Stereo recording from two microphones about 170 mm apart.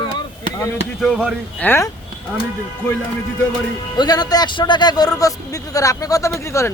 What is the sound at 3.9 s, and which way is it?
A man's voice, 25° left (ahead or behind).